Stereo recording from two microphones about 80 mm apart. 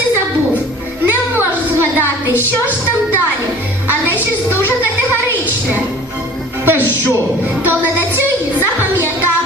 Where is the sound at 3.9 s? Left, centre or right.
Right.